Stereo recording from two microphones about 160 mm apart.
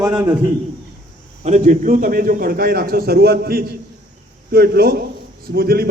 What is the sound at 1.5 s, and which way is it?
A man's voice, 50° right (ahead or behind).